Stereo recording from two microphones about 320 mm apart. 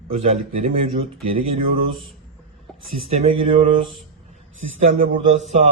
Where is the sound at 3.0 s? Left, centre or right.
Centre.